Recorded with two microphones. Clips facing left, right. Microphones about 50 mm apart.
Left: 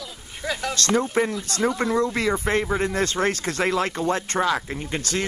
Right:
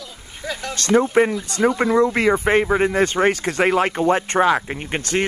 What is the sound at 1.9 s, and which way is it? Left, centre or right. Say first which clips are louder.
Speech: right 6 dB; right.